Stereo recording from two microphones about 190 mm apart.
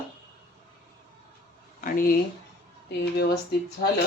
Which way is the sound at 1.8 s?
45° left (ahead or behind).